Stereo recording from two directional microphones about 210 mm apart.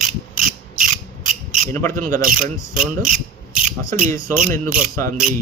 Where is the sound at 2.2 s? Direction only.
40° right (ahead or behind).